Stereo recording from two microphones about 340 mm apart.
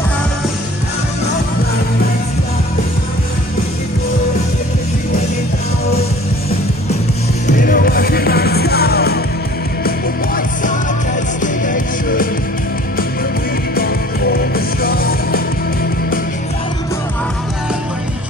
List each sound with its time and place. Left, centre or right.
7.4 s music: left
13.7 s music: left